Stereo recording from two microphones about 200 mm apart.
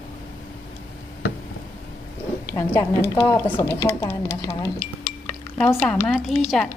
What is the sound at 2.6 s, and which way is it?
A woman's voice, 15° left (ahead or behind).